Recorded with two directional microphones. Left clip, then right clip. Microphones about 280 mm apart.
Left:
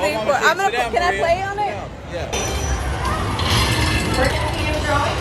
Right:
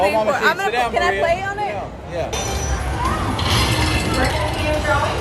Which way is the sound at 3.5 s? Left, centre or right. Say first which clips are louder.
Even; centre.